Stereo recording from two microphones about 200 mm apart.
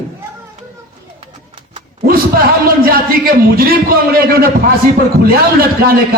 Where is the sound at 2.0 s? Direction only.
50° right (ahead or behind).